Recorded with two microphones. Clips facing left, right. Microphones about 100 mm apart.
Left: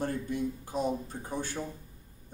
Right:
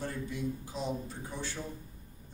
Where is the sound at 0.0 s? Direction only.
50° left (ahead or behind).